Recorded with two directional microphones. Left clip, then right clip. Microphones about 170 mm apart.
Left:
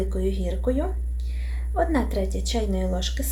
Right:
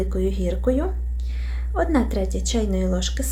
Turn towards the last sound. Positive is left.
turn(degrees=-35)  # may be behind; listen again after turning